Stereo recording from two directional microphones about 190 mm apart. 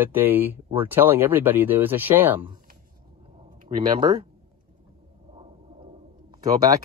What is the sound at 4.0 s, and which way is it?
Speech, 25° right (ahead or behind).